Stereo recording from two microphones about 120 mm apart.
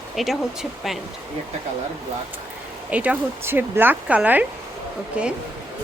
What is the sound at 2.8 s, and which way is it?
Speech, 10° right (ahead or behind).